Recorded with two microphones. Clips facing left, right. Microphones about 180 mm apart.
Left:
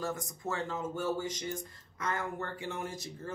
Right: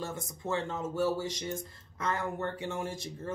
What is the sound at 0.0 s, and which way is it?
Speech, 25° right (ahead or behind).